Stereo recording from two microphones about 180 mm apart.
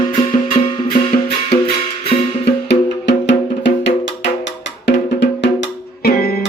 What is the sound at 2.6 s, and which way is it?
Music, 75° left (ahead or behind).